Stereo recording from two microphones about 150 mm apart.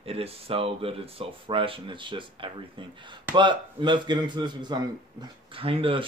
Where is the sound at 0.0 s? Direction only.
40° right (ahead or behind).